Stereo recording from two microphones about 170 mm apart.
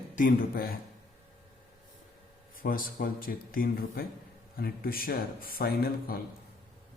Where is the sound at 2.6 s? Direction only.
55° left (ahead or behind).